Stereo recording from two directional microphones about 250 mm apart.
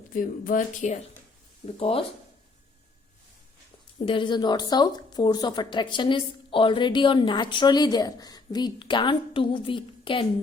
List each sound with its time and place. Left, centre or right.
0.1 s speech: left
3.9 s speech: centre